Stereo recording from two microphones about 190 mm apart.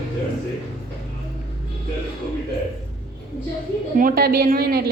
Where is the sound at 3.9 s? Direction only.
50° right (ahead or behind).